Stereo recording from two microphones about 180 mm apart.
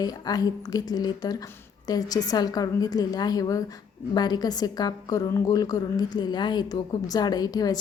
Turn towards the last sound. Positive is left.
turn(degrees=20)  # may be behind; listen again after turning